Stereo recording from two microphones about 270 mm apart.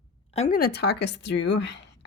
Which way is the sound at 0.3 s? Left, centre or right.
Left.